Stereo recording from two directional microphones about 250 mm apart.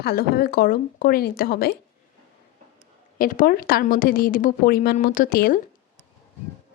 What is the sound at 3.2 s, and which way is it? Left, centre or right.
A woman's voice, left.